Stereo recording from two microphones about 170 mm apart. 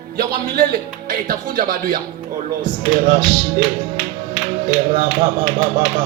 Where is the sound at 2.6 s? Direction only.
50° right (ahead or behind).